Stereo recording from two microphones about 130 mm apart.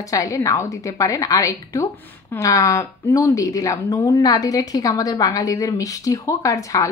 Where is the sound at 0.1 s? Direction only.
25° left (ahead or behind).